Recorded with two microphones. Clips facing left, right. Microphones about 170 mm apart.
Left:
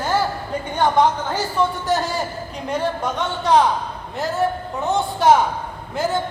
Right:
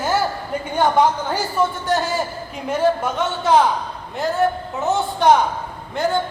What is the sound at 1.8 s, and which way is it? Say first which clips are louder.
Speech: even; centre (ahead or behind).